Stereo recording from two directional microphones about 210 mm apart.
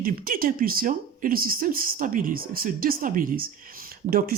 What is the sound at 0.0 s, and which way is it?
Speech, 45° right (ahead or behind).